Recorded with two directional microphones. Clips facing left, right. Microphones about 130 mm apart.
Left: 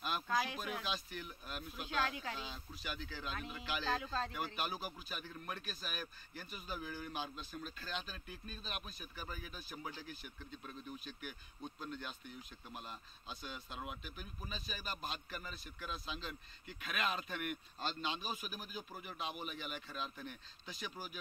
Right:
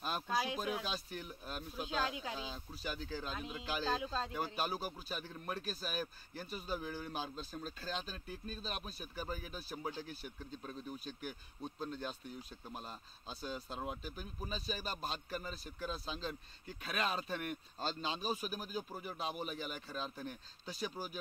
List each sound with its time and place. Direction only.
0.3 s a sound: 10° right (ahead or behind)
0.8 s a man's voice: 35° right (ahead or behind)
1.9 s speech: 15° right (ahead or behind)
2.5 s a man's voice: 35° right (ahead or behind)
3.3 s speech: 20° right (ahead or behind)
4.6 s a man's voice: 35° right (ahead or behind)